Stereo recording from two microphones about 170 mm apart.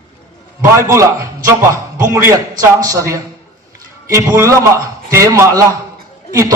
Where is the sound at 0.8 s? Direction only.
15° right (ahead or behind).